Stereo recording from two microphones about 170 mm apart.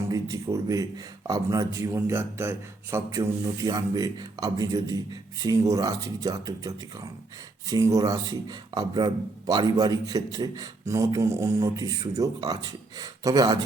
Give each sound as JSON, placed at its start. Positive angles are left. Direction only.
{"t": 0.1, "sound": "speech", "side_deg": -20}